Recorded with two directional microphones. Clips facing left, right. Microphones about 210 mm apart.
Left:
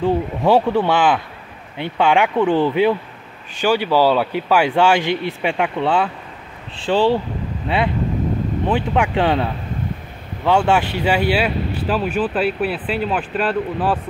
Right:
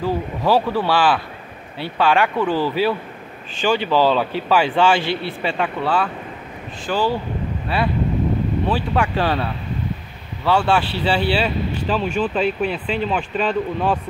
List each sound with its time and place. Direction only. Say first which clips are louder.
0.0 s speech: left 4 dB; 25° left (ahead or behind)
3.6 s a man's voice: left 2 dB; 10° left (ahead or behind); by 7.2 s 25° left (ahead or behind)
8.6 s a man's voice: left 4 dB; 15° left (ahead or behind)